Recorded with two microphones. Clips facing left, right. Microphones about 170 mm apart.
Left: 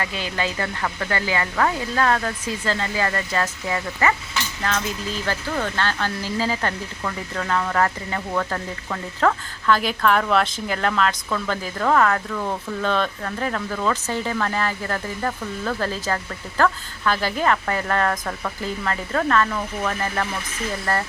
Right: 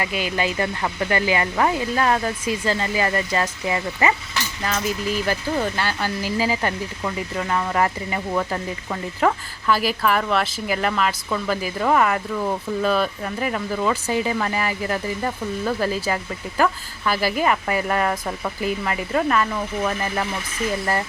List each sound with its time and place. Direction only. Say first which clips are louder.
0.0 s speech: right 3 dB; 10° right (ahead or behind)